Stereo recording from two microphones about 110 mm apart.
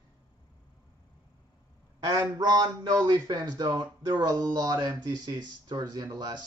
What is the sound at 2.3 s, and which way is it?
Speech, 40° right (ahead or behind).